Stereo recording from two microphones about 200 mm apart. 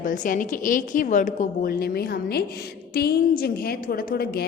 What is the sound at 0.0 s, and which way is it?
A woman's voice, 40° left (ahead or behind).